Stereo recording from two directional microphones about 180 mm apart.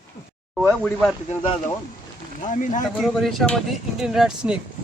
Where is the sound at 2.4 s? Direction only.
45° left (ahead or behind).